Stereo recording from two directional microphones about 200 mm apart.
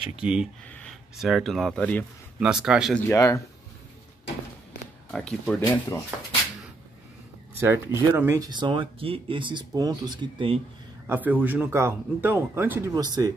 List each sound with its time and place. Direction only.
0.1 s speech: 5° right (ahead or behind)
2.4 s speech: 5° right (ahead or behind)
3.0 s speech: 15° left (ahead or behind)
5.1 s speech: 5° left (ahead or behind)
5.6 s speech: 15° left (ahead or behind)
7.6 s speech: 10° right (ahead or behind)
11.1 s speech: 10° right (ahead or behind)